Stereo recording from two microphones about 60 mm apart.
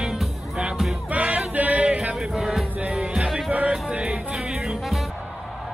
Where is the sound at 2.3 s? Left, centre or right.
Centre.